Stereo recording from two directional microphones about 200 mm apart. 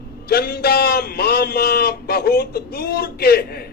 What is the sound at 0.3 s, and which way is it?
Speech, 50° left (ahead or behind).